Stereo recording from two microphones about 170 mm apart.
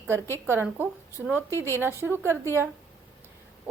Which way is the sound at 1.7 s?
15° right (ahead or behind).